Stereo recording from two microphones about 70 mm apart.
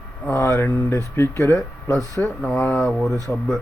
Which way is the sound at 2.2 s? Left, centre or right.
Centre.